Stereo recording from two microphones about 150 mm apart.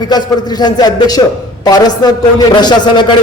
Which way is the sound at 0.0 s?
25° left (ahead or behind).